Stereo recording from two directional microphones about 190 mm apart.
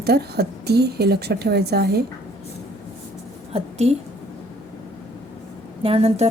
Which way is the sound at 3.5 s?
35° right (ahead or behind).